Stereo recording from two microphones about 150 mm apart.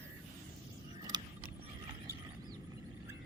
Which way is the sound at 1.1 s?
30° right (ahead or behind).